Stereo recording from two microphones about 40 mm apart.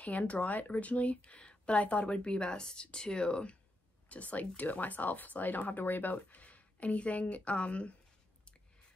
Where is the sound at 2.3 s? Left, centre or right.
Left.